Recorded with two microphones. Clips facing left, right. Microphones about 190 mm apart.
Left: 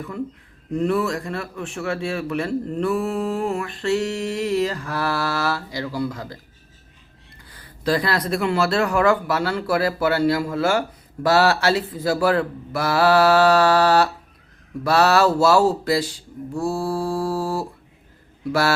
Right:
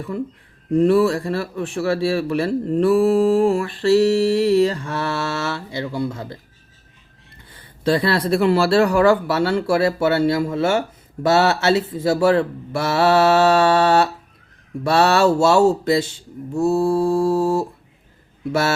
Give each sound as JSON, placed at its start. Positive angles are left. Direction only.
{"t": 0.7, "sound": "speech", "side_deg": -30}
{"t": 7.5, "sound": "speech", "side_deg": -25}